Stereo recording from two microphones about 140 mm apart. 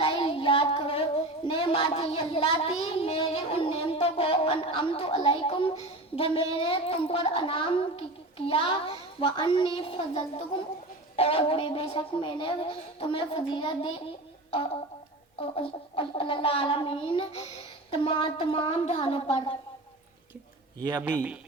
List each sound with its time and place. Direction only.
0.0 s child singing: 40° left (ahead or behind)
6.6 s a child's voice: 40° left (ahead or behind)
15.4 s a child's voice: 45° left (ahead or behind)
21.0 s speech: 10° right (ahead or behind)